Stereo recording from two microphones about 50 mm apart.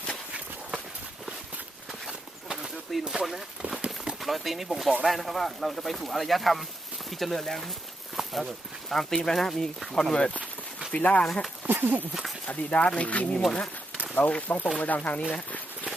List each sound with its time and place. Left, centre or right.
1.9 s a sound: centre
4.2 s speech: centre
10.9 s speech: left
11.6 s a sound: right
12.5 s speech: left
13.3 s speech: centre
14.2 s speech: left